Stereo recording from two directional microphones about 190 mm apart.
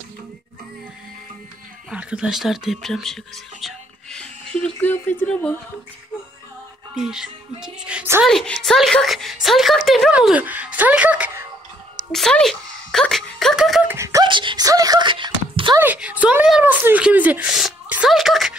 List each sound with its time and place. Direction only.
1.9 s a woman's voice: 5° right (ahead or behind)
3.6 s music: 5° left (ahead or behind)
7.0 s a woman's voice: 5° right (ahead or behind)
12.1 s speech: 5° left (ahead or behind)
13.9 s wail: 15° right (ahead or behind)
15.8 s speech: 10° right (ahead or behind)